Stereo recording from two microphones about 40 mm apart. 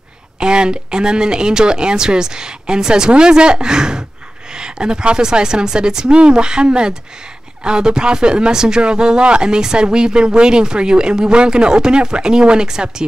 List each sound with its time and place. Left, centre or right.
0.4 s speech: right